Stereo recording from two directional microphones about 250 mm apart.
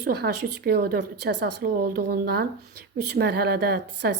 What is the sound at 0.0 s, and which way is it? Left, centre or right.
A woman's voice, right.